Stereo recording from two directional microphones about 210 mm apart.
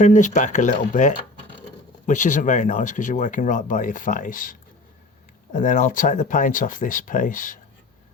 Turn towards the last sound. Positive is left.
turn(degrees=40)  # may be behind; listen again after turning